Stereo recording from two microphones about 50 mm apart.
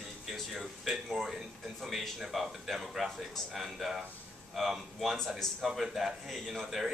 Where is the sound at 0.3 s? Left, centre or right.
Centre.